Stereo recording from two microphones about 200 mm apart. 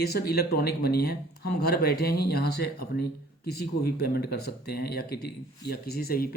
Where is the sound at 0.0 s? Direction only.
50° left (ahead or behind).